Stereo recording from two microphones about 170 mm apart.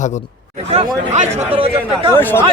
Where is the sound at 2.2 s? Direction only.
10° left (ahead or behind).